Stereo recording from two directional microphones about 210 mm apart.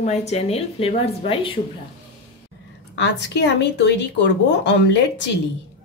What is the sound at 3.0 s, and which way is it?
Speech, 55° left (ahead or behind).